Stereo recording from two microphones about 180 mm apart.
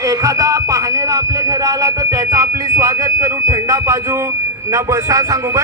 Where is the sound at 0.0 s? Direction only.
20° right (ahead or behind).